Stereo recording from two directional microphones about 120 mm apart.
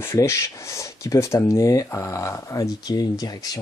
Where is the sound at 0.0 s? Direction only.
25° left (ahead or behind).